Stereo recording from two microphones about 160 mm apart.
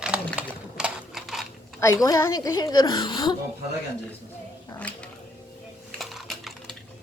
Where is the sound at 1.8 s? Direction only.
20° left (ahead or behind).